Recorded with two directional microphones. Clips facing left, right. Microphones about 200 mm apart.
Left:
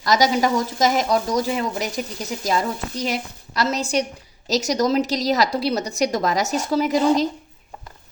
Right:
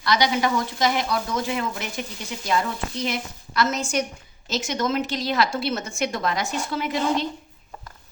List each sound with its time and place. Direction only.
0.0 s speech: 40° left (ahead or behind)